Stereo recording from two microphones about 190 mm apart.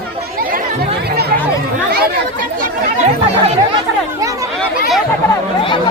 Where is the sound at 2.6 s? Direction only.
35° right (ahead or behind).